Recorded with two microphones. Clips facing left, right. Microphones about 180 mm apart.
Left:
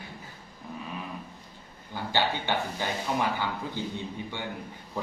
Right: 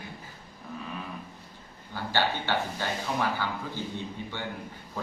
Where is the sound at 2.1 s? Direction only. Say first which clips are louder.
Even; 15° left (ahead or behind).